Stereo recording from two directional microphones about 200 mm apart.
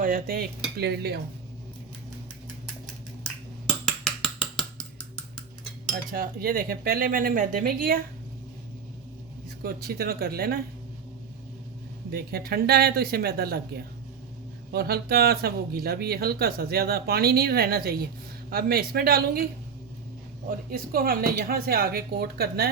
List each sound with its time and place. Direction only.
0.0 s speech: 45° right (ahead or behind)
3.8 s a sound: 5° left (ahead or behind)
6.1 s speech: 45° right (ahead or behind)
9.6 s speech: 50° right (ahead or behind)
12.1 s speech: 50° right (ahead or behind)
14.7 s speech: 50° right (ahead or behind)
20.5 s speech: 45° right (ahead or behind)